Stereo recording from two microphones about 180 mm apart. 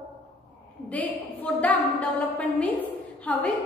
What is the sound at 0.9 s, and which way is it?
Music, 10° left (ahead or behind).